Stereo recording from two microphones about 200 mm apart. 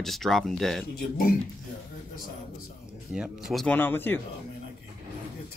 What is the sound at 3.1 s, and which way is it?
Speech, centre (ahead or behind).